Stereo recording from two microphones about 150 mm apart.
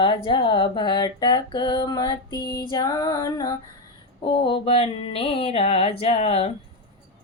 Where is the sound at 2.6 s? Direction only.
25° left (ahead or behind).